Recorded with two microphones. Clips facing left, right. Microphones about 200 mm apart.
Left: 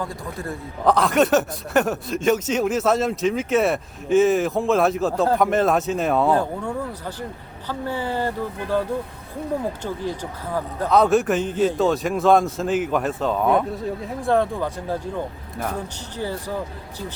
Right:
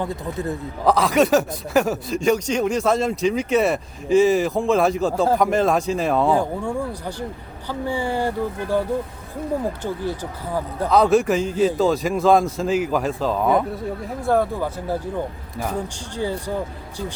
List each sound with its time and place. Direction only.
0.0 s a man's voice: 20° right (ahead or behind)
0.9 s speech: centre (ahead or behind)
6.3 s speech: 10° right (ahead or behind)
9.8 s speech: 10° right (ahead or behind)